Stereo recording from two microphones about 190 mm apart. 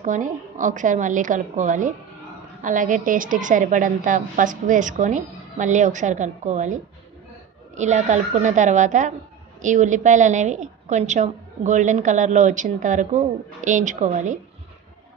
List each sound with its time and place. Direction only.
0.0 s a woman's voice: 40° right (ahead or behind)
7.7 s a woman's voice: 40° right (ahead or behind)